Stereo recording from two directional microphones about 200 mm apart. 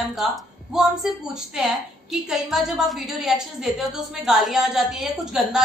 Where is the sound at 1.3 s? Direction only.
Centre (ahead or behind).